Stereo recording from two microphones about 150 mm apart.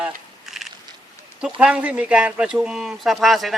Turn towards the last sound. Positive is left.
turn(degrees=0)  # may be behind; listen again after turning